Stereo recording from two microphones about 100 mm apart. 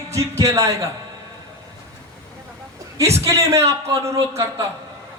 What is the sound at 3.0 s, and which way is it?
A man's voice, 30° right (ahead or behind).